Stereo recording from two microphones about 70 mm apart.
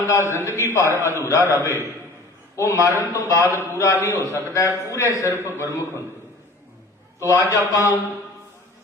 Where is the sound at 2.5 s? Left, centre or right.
Left.